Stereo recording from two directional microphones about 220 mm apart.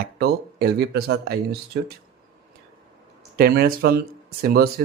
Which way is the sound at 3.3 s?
45° right (ahead or behind).